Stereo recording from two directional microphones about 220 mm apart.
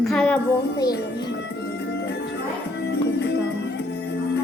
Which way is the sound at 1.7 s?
50° left (ahead or behind).